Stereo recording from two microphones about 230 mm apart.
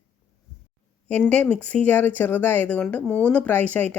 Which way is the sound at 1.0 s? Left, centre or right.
Centre.